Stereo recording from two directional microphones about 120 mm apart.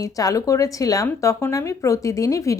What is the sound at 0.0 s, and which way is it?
Speech, 30° left (ahead or behind).